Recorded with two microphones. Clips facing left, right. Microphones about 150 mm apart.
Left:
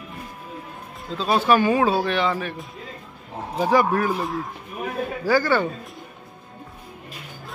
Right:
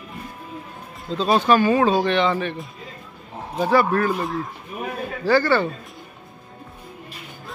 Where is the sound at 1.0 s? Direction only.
Centre (ahead or behind).